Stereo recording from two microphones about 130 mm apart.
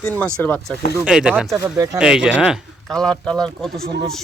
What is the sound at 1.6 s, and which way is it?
Speech, 25° right (ahead or behind).